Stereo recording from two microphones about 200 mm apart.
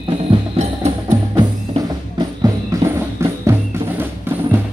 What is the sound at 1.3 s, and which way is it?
Music, 20° right (ahead or behind).